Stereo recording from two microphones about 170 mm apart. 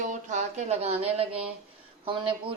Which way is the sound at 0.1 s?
45° right (ahead or behind).